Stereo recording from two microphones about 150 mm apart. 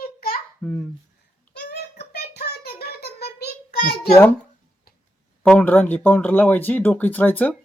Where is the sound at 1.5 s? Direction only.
90° left.